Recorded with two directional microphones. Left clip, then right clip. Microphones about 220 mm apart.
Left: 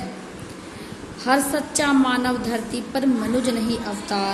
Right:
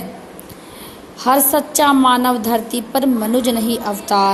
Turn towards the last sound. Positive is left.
turn(degrees=-30)  # may be behind; listen again after turning